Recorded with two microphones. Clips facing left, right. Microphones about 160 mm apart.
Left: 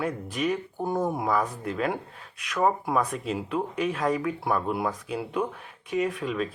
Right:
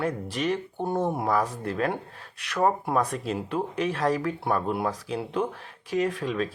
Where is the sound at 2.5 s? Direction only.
35° right (ahead or behind).